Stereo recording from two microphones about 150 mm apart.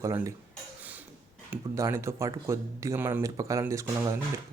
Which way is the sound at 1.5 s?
20° right (ahead or behind).